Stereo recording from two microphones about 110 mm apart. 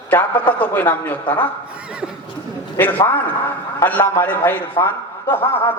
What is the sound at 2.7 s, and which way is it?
A man's voice, 20° left (ahead or behind).